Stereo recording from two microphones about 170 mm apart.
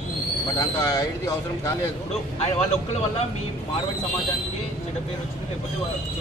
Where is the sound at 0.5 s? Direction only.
20° left (ahead or behind).